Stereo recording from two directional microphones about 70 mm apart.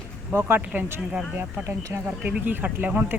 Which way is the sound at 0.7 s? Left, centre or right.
Right.